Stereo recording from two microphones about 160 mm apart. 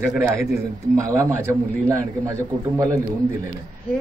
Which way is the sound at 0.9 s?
20° right (ahead or behind).